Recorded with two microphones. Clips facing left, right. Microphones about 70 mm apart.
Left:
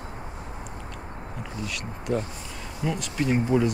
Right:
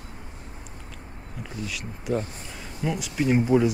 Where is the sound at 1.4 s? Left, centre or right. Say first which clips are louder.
Right 1 dB; centre.